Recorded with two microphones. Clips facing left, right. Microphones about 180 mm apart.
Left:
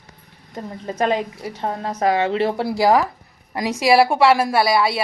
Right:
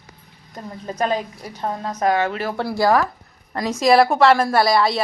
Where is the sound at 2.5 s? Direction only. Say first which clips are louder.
Right 2 dB; 10° left (ahead or behind).